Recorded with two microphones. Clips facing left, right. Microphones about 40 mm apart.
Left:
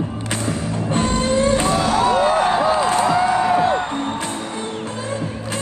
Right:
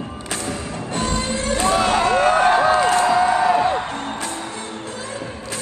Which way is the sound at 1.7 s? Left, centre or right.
Right.